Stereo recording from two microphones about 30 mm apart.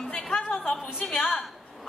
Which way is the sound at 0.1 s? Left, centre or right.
Left.